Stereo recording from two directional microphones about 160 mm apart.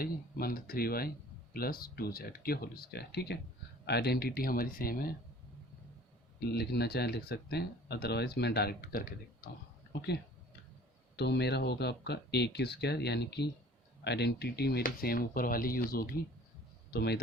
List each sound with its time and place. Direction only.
0.0 s speech: 70° left (ahead or behind)
6.5 s speech: 90° left; by 9.1 s 70° left (ahead or behind)
9.9 s speech: 90° left
11.2 s speech: 90° left; by 16.0 s 65° left (ahead or behind)
16.9 s speech: 90° left